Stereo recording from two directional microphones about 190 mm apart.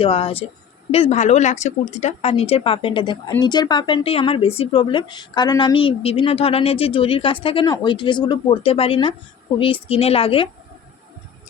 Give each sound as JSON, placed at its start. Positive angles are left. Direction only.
{"t": 0.0, "sound": "speech", "side_deg": 30}